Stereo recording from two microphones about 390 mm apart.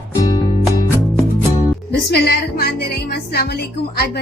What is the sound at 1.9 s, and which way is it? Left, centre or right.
A woman's voice, left.